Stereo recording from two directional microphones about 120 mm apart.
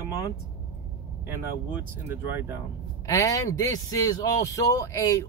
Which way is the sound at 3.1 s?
30° left (ahead or behind).